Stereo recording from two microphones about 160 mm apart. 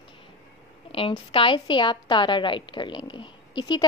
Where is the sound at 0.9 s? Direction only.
30° left (ahead or behind).